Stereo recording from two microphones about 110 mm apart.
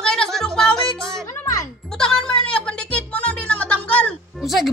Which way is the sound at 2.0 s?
5° left (ahead or behind).